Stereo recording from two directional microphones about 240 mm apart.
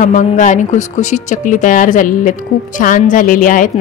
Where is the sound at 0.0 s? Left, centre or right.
Left.